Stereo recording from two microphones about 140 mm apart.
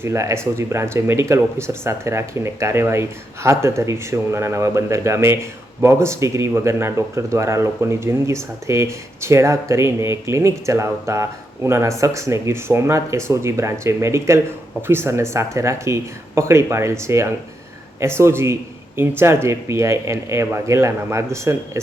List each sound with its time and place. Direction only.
0.0 s speech: 20° right (ahead or behind)